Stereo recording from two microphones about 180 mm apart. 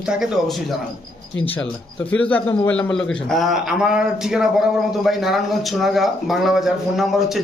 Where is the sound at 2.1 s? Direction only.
10° left (ahead or behind).